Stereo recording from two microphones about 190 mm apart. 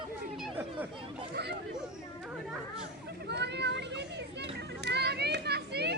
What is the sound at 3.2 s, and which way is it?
Children playing, 60° right (ahead or behind).